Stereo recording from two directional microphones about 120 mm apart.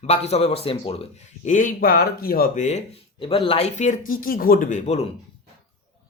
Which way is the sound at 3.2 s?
45° left (ahead or behind).